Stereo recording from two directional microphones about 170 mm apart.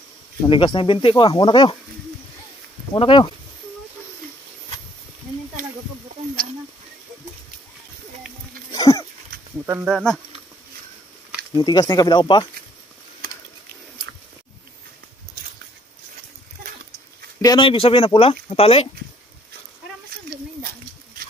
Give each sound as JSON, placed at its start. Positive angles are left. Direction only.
{"t": 0.5, "sound": "speech", "side_deg": 30}
{"t": 2.9, "sound": "speech", "side_deg": 30}
{"t": 8.7, "sound": "a sound", "side_deg": 20}
{"t": 9.7, "sound": "speech", "side_deg": -10}
{"t": 11.5, "sound": "speech", "side_deg": 25}
{"t": 17.4, "sound": "speech", "side_deg": 25}